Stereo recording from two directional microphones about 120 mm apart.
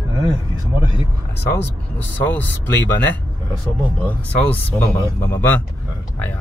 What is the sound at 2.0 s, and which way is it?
Speech, 15° left (ahead or behind).